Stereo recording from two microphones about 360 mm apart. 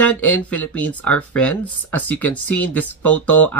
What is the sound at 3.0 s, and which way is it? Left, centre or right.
Speech, left.